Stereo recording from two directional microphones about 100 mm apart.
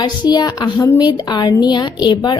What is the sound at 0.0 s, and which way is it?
A woman's voice, 45° left (ahead or behind).